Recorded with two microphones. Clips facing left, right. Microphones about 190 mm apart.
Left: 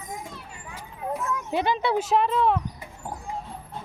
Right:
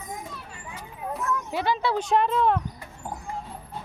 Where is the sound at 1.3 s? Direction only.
20° left (ahead or behind).